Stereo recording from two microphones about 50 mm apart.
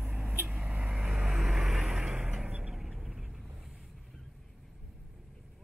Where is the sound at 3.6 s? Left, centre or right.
Centre.